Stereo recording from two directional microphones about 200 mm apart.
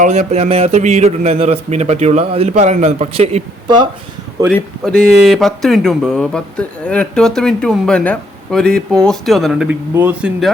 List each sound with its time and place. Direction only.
0.0 s a man's voice: 35° right (ahead or behind)
4.5 s speech: 5° left (ahead or behind)